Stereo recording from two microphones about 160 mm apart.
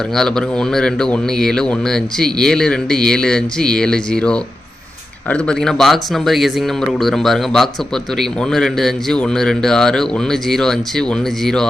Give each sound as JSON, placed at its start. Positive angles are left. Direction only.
{"t": 0.1, "sound": "a man's voice", "side_deg": 5}